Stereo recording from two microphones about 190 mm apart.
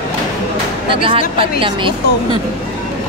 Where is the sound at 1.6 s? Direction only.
25° right (ahead or behind).